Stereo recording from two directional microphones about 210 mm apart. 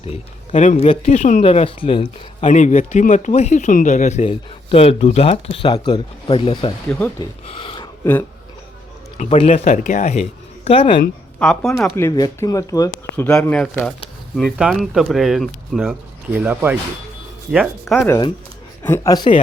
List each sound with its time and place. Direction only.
0.0 s speech: 30° left (ahead or behind)
7.4 s a sound: 25° left (ahead or behind)
9.1 s speech: 35° left (ahead or behind)
11.3 s speech: 5° left (ahead or behind)
11.9 s speech: 15° left (ahead or behind); by 17.9 s 5° right (ahead or behind)
17.9 s speech: 10° left (ahead or behind)